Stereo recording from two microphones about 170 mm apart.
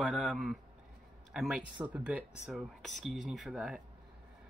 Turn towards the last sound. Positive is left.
turn(degrees=-5)  # may be behind; listen again after turning